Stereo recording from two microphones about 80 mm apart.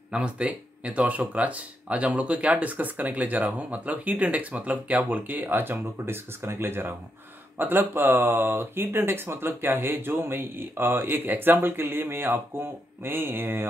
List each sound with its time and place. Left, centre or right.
0.1 s speech: centre; by 13.7 s right